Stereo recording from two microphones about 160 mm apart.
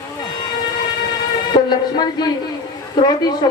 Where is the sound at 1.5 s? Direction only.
25° left (ahead or behind).